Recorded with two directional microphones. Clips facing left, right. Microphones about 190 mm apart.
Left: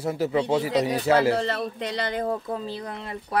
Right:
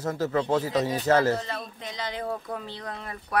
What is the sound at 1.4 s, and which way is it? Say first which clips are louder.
Speech: left 8 dB; 75° left (ahead or behind).